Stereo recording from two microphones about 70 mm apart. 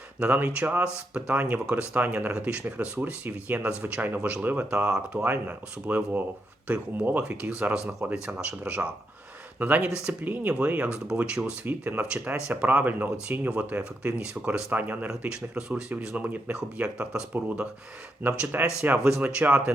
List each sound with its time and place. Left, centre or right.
0.2 s speech: right
11.6 s speech: right